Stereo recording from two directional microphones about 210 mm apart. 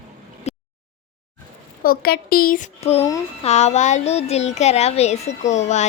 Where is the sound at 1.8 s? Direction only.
45° left (ahead or behind).